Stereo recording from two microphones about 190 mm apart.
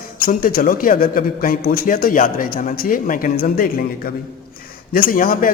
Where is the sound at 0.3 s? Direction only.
45° left (ahead or behind).